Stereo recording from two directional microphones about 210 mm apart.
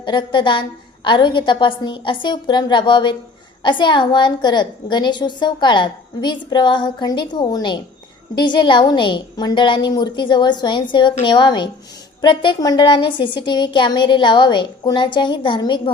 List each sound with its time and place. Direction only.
0.0 s a woman's voice: 20° left (ahead or behind)